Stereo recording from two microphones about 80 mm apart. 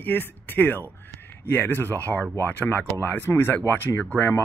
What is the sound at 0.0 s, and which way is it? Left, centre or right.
Speech, left.